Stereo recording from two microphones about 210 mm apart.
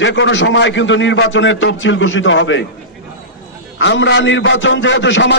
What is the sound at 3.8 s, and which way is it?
A man's voice, 60° left (ahead or behind).